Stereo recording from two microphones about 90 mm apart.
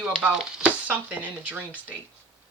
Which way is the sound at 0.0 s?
10° right (ahead or behind).